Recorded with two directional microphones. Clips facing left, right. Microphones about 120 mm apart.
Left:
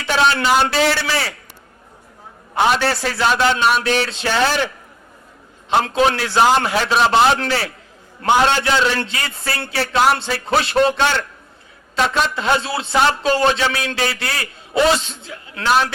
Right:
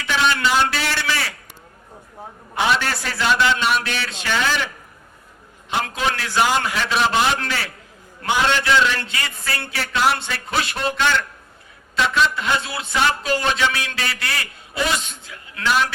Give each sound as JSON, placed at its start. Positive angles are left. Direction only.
{"t": 0.0, "sound": "a sound", "side_deg": 30}
{"t": 0.7, "sound": "speech", "side_deg": 35}
{"t": 3.0, "sound": "speech", "side_deg": 40}
{"t": 11.9, "sound": "a woman's voice", "side_deg": 45}
{"t": 12.3, "sound": "speech", "side_deg": 30}